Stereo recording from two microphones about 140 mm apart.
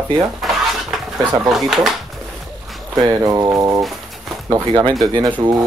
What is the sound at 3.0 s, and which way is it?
Speech, 25° right (ahead or behind).